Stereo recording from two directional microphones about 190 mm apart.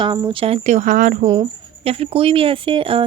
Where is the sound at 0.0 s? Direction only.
25° right (ahead or behind); by 1.3 s 45° right (ahead or behind).